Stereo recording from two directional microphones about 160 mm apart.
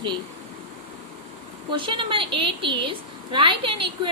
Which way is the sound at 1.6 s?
30° right (ahead or behind).